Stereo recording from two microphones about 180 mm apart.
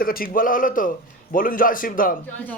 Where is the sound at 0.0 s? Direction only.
55° left (ahead or behind).